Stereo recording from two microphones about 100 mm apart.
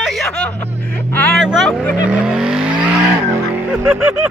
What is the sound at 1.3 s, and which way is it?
Vehicle, centre (ahead or behind).